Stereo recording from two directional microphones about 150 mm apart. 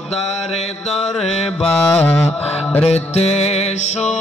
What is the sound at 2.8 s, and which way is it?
Music, 45° left (ahead or behind).